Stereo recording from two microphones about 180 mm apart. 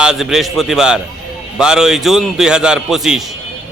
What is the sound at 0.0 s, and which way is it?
A man's voice, 5° right (ahead or behind).